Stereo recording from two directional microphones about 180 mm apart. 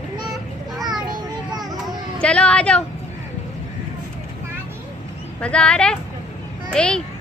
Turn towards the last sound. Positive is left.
turn(degrees=5)  # may be behind; listen again after turning